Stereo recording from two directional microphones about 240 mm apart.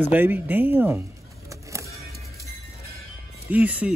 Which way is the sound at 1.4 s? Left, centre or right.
Centre.